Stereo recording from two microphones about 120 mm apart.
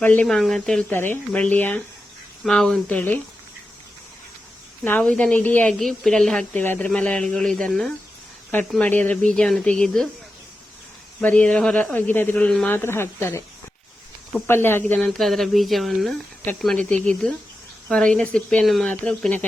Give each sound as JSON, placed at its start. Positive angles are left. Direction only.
{"t": 0.0, "sound": "speech", "side_deg": 15}
{"t": 0.3, "sound": "speech", "side_deg": 5}
{"t": 0.9, "sound": "speech", "side_deg": 20}
{"t": 2.4, "sound": "speech", "side_deg": 5}
{"t": 4.9, "sound": "speech", "side_deg": 10}
{"t": 5.8, "sound": "speech", "side_deg": 5}
{"t": 11.2, "sound": "speech", "side_deg": 10}
{"t": 12.7, "sound": "a woman's voice", "side_deg": 20}
{"t": 14.4, "sound": "speech", "side_deg": 20}
{"t": 17.8, "sound": "speech", "side_deg": 5}